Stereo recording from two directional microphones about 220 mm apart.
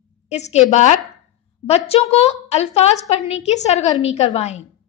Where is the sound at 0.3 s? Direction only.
30° left (ahead or behind).